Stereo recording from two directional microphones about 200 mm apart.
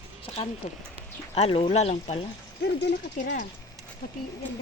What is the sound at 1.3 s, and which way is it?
Speech, 30° left (ahead or behind).